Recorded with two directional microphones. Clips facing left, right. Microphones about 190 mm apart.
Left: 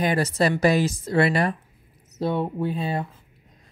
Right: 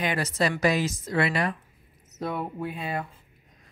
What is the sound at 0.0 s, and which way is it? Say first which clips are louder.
Speech: left 5 dB; 35° left (ahead or behind).